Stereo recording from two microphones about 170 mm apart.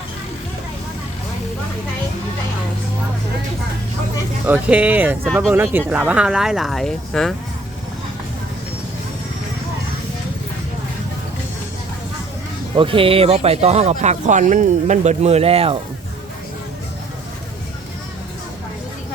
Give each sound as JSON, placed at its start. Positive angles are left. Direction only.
{"t": 4.4, "sound": "speech", "side_deg": -10}
{"t": 5.2, "sound": "speech", "side_deg": 0}
{"t": 5.5, "sound": "speech", "side_deg": -10}
{"t": 12.7, "sound": "speech", "side_deg": -30}